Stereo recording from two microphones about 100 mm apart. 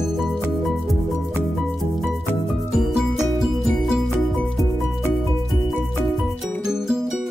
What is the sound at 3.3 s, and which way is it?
Music, centre (ahead or behind).